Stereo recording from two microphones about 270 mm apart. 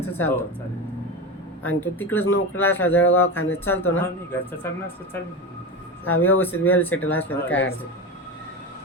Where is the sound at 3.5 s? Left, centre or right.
Centre.